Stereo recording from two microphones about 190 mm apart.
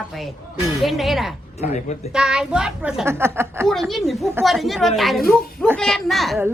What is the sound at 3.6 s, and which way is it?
A woman's voice, centre (ahead or behind).